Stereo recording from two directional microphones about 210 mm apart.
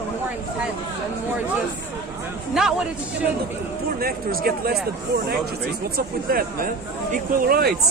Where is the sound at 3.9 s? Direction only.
45° right (ahead or behind).